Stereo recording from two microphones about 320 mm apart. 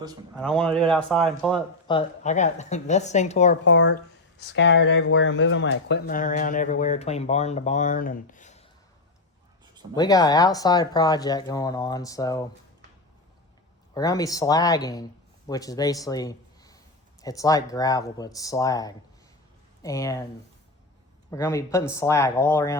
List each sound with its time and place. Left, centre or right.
0.3 s a man's voice: centre
1.9 s speech: centre
3.6 s speech: left
9.9 s speech: centre
13.9 s a man's voice: centre
21.2 s speech: centre